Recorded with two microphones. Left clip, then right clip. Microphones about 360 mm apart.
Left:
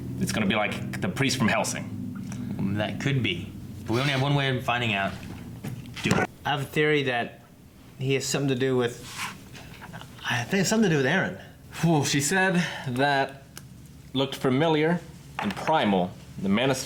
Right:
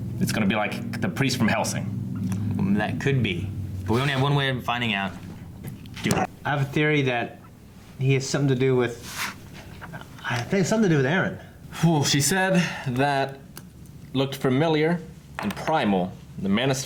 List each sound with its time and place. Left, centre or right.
0.2 s speech: centre
2.3 s a man's voice: left
6.0 s a man's voice: left
6.4 s speech: right
9.9 s speech: right
11.7 s speech: centre